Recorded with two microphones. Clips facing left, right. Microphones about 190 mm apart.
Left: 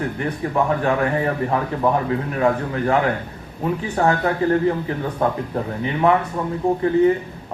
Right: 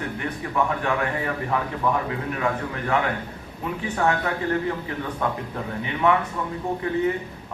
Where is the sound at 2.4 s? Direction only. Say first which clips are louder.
Left 9 dB; 35° left (ahead or behind).